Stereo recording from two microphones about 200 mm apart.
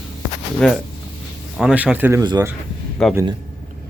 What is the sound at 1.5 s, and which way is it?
Speech, 5° right (ahead or behind).